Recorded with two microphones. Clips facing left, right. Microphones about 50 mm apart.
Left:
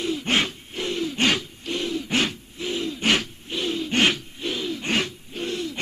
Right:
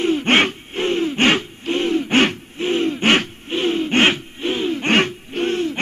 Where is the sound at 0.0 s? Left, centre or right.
Right.